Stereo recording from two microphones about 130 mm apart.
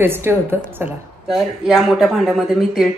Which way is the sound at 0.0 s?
20° right (ahead or behind).